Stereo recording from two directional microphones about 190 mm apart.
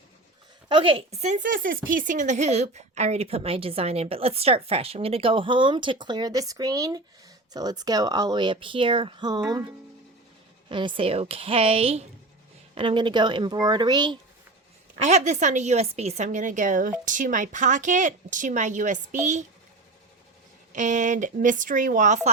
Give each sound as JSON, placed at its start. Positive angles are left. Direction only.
{"t": 0.7, "sound": "speech", "side_deg": -30}
{"t": 10.7, "sound": "speech", "side_deg": -25}
{"t": 15.0, "sound": "speech", "side_deg": -40}
{"t": 20.7, "sound": "speech", "side_deg": -40}